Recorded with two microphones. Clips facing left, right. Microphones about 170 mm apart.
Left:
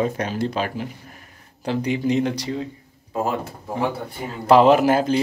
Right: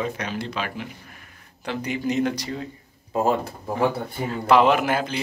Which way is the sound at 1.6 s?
30° left (ahead or behind).